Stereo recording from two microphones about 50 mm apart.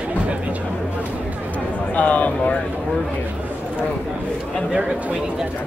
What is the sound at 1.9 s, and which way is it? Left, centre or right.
Speech, left.